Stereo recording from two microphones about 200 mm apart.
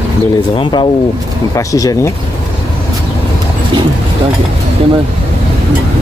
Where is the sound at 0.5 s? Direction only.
25° left (ahead or behind).